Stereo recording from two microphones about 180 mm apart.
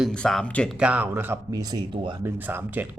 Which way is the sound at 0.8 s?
10° right (ahead or behind).